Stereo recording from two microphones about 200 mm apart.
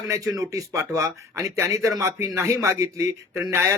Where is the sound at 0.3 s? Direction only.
15° right (ahead or behind).